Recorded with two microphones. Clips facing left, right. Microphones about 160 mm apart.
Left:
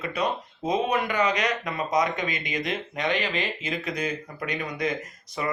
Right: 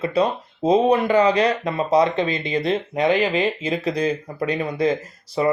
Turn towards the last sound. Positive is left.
turn(degrees=-30)  # may be behind; listen again after turning